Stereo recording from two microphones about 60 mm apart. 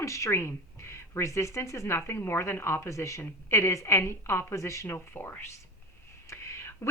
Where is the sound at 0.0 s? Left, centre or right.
Left.